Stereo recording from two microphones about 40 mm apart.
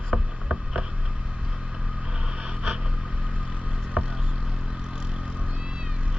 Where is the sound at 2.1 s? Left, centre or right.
Right.